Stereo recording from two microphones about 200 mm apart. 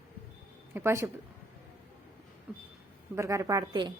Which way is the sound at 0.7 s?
15° right (ahead or behind).